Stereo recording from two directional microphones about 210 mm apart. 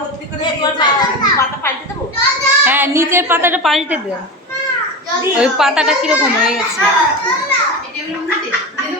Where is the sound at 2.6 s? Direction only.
10° right (ahead or behind).